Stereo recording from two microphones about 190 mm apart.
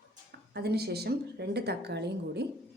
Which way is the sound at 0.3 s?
55° right (ahead or behind).